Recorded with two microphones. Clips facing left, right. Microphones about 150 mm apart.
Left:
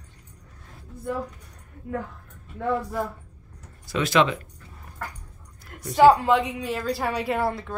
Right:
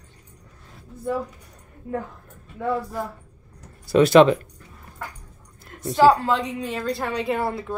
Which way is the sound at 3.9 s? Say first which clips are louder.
Right 8 dB; 40° right (ahead or behind).